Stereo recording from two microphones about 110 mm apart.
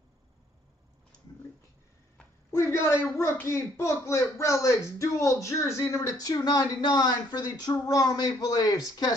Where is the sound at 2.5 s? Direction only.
25° left (ahead or behind).